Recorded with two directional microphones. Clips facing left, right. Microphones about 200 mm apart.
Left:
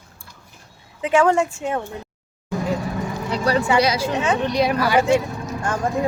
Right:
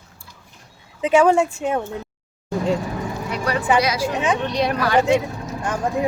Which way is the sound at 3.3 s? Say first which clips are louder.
Left 4 dB; 30° left (ahead or behind).